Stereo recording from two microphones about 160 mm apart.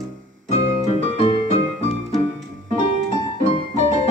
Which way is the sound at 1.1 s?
40° left (ahead or behind).